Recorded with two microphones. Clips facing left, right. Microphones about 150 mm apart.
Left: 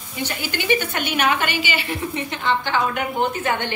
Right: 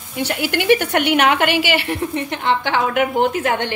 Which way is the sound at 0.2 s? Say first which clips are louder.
Right 6 dB; 70° right (ahead or behind).